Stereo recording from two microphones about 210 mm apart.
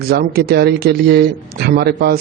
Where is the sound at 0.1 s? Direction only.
50° right (ahead or behind).